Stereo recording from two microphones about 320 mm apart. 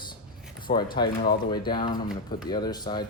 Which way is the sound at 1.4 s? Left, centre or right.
Centre.